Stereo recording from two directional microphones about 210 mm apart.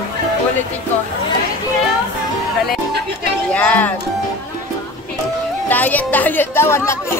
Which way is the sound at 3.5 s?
5° left (ahead or behind).